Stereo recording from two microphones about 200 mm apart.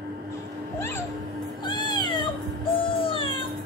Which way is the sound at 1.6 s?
20° left (ahead or behind).